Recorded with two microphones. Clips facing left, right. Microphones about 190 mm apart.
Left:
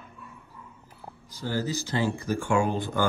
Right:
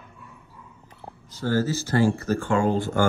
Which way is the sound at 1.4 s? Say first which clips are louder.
Right 6 dB; 15° left (ahead or behind).